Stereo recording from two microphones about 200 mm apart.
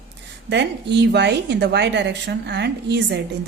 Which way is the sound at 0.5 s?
60° right (ahead or behind).